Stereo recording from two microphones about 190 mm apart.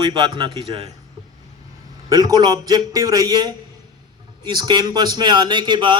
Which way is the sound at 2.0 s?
20° right (ahead or behind).